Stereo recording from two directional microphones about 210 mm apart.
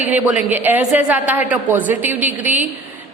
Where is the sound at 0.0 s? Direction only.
10° right (ahead or behind).